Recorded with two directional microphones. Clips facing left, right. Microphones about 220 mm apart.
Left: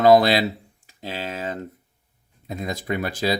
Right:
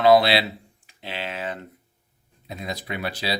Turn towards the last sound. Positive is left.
turn(degrees=45)  # may be behind; listen again after turning